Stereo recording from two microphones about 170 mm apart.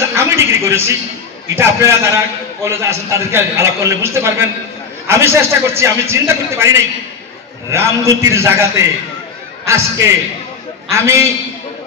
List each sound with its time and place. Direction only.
0.1 s a man's voice: 15° right (ahead or behind)
9.7 s a man's voice: 15° right (ahead or behind)